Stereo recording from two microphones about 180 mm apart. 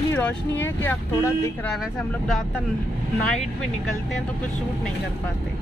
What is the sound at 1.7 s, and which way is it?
Speech, centre (ahead or behind).